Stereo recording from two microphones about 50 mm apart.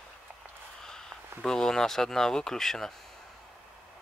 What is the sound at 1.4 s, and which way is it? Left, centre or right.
Speech, centre.